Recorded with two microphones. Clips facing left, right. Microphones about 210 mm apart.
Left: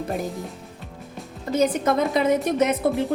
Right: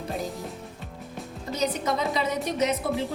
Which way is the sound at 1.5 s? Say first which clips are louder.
Left 7 dB; 50° left (ahead or behind).